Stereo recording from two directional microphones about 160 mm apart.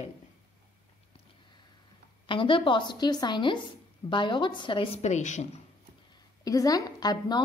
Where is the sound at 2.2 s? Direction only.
30° left (ahead or behind).